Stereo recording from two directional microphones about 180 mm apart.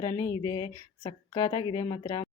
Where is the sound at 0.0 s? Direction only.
25° left (ahead or behind).